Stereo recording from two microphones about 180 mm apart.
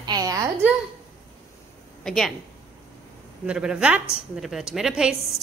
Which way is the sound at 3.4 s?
5° right (ahead or behind).